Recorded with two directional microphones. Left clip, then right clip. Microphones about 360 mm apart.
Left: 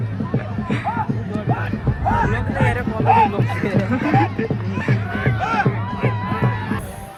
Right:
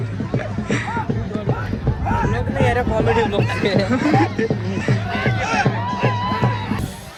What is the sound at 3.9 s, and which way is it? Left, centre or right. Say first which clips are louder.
Speech: right 1 dB; centre.